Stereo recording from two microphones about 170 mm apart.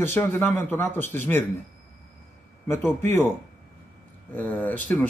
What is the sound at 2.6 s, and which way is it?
Speech, 15° left (ahead or behind).